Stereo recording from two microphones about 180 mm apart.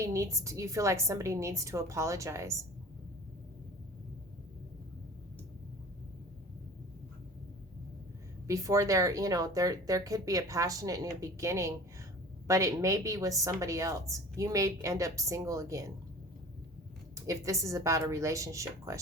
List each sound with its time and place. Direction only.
0.0 s a woman's voice: 15° right (ahead or behind)
8.4 s a woman's voice: 20° right (ahead or behind)
17.2 s a woman's voice: 20° right (ahead or behind)